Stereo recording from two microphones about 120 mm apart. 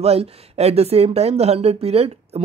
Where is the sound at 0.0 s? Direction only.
55° right (ahead or behind).